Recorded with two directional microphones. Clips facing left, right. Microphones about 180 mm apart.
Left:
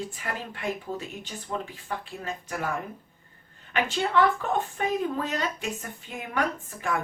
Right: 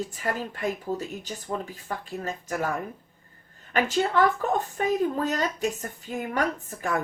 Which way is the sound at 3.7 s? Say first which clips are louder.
Right 1 dB; 45° right (ahead or behind).